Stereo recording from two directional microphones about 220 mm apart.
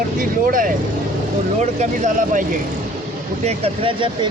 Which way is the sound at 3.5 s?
25° right (ahead or behind).